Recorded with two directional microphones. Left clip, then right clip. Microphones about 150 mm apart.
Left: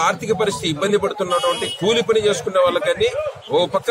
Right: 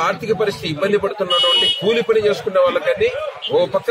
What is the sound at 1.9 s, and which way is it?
A man's voice, 40° left (ahead or behind).